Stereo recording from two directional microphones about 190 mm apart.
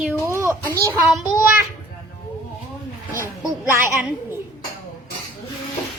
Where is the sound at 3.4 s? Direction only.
10° right (ahead or behind).